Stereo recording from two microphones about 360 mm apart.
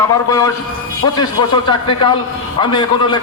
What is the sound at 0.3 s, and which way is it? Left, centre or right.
A man's voice, centre.